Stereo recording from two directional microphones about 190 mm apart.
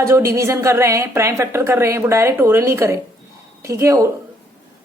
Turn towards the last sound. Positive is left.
turn(degrees=-15)  # may be behind; listen again after turning